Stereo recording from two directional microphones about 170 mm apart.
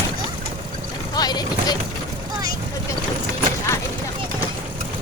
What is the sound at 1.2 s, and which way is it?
Speech, 25° left (ahead or behind).